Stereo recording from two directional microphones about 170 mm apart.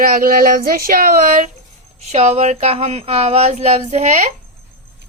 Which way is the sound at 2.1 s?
40° right (ahead or behind).